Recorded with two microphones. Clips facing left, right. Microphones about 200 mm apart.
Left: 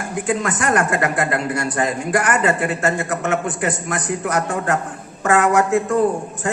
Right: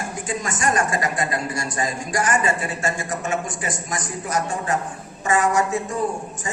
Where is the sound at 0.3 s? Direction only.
60° left (ahead or behind).